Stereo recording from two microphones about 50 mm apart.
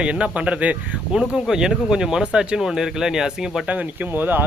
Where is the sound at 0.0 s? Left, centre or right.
Right.